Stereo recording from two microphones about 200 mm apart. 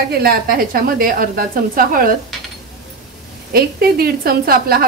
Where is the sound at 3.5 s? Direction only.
50° right (ahead or behind).